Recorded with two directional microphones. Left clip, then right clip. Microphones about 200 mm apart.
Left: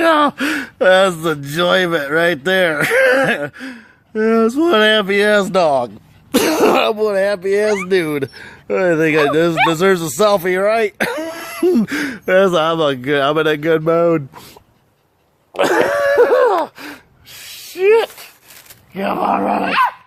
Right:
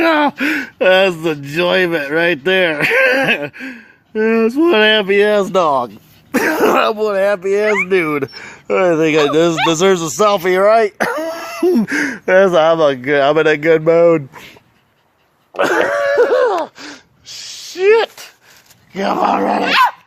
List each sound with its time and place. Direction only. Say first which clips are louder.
0.0 s speech: even; centre (ahead or behind)
11.0 s throat clearing: right 2 dB; 15° left (ahead or behind)
12.3 s speech: right 3 dB; 10° left (ahead or behind)
15.6 s gasp: even; 15° right (ahead or behind); by 18.3 s 40° right (ahead or behind)
18.9 s speech: right 2 dB; 45° right (ahead or behind)